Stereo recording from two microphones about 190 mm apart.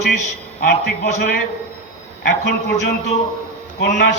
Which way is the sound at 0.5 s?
55° left (ahead or behind).